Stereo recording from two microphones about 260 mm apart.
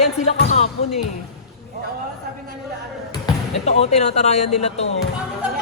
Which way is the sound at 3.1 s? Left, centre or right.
Left.